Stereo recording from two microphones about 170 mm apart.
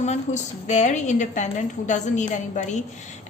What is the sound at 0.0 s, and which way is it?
A woman's voice, 40° left (ahead or behind).